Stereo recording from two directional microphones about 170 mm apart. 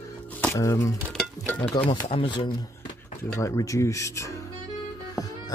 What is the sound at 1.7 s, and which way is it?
Speech, 30° left (ahead or behind).